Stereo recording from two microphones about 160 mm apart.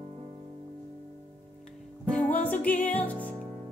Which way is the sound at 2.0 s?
10° left (ahead or behind).